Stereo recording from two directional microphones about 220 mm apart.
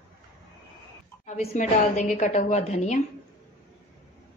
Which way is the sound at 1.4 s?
30° left (ahead or behind).